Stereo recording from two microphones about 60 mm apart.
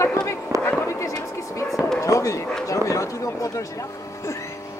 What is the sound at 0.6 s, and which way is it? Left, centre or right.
Fireworks, left.